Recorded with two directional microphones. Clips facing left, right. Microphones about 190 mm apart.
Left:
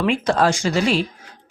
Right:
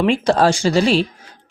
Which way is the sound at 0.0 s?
30° right (ahead or behind).